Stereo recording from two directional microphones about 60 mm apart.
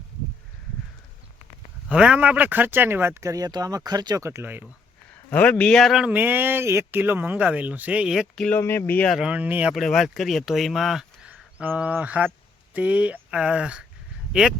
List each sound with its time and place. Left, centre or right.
1.9 s speech: centre; by 3.2 s right
3.2 s speech: right
5.3 s a man's voice: left
5.6 s speech: centre
6.1 s speech: right
7.0 s speech: right
8.0 s speech: centre
8.5 s speech: left
9.3 s speech: right
9.7 s speech: centre
11.2 s a sound: right
11.8 s speech: right